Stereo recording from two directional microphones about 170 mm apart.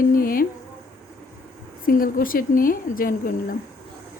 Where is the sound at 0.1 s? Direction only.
55° left (ahead or behind).